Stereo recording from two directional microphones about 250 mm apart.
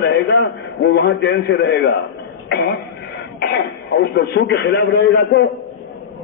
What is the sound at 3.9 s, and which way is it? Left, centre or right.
A man's voice, left.